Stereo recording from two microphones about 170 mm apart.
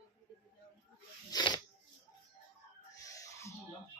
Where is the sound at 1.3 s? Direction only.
25° left (ahead or behind).